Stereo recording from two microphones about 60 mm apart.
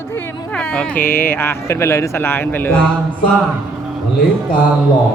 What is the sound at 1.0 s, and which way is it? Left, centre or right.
Speech, left.